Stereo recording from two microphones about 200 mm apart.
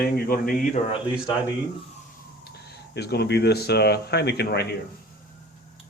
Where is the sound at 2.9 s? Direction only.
55° left (ahead or behind).